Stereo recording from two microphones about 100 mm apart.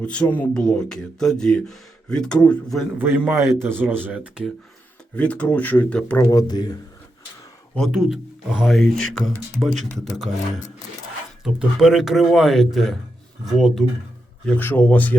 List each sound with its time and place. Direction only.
0.0 s speech: 10° left (ahead or behind)
3.0 s speech: 20° right (ahead or behind)
5.1 s speech: 15° left (ahead or behind)
6.1 s speech: 30° left (ahead or behind)
6.5 s speech: 45° left (ahead or behind)
7.8 s speech: 5° right (ahead or behind)
11.4 s speech: 5° right (ahead or behind)
14.4 s speech: 15° left (ahead or behind)